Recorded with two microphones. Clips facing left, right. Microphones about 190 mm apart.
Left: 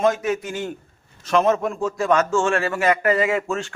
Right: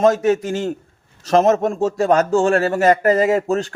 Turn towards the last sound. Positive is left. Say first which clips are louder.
# right 5 dB
turn(degrees=-35)  # may be behind; listen again after turning